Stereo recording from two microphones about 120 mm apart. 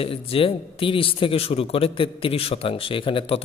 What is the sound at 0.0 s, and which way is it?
Speech, 50° left (ahead or behind).